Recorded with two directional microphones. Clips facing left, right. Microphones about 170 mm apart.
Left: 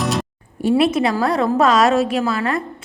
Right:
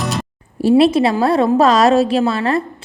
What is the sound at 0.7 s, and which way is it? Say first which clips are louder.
A woman's voice: right 4 dB; 30° right (ahead or behind).